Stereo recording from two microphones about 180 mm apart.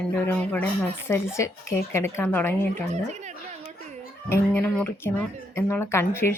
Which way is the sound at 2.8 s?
40° right (ahead or behind).